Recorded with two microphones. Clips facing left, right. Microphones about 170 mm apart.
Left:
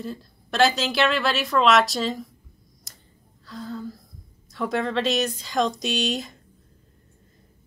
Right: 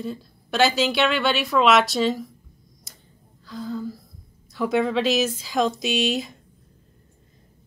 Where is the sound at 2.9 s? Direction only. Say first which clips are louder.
Right 2 dB; centre (ahead or behind).